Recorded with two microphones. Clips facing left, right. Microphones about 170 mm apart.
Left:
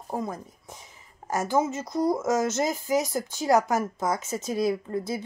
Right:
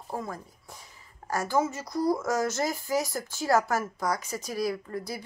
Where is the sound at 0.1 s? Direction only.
20° left (ahead or behind).